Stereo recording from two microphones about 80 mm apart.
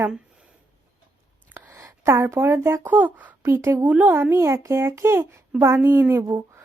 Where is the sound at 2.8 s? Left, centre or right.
Right.